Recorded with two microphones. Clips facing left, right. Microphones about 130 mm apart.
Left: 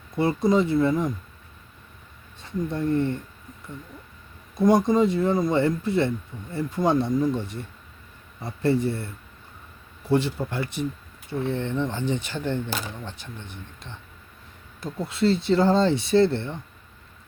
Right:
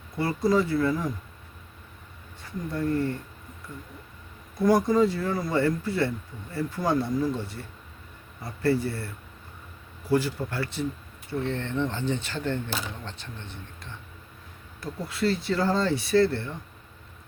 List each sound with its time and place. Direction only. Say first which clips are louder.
0.2 s speech: left 3 dB; 20° left (ahead or behind)
2.4 s speech: left 3 dB; 25° left (ahead or behind)
4.5 s speech: left 2 dB; 20° left (ahead or behind)
10.1 s speech: left 2 dB; 25° left (ahead or behind)